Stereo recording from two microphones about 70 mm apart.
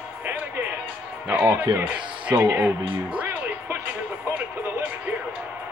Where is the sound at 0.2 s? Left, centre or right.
Right.